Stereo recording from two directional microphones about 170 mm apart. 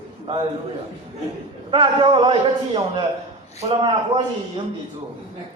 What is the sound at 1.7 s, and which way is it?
Speech, 30° right (ahead or behind).